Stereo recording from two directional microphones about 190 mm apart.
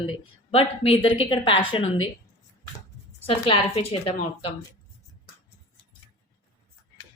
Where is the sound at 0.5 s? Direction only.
30° left (ahead or behind).